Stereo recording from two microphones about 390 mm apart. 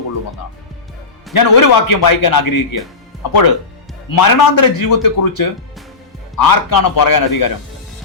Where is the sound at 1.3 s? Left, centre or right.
Left.